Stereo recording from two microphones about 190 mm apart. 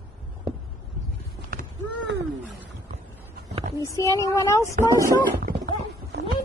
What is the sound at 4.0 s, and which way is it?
Speech, 15° left (ahead or behind).